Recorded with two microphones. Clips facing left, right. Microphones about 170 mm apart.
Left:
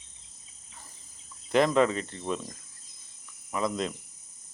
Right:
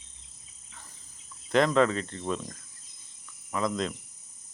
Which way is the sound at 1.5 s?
10° left (ahead or behind).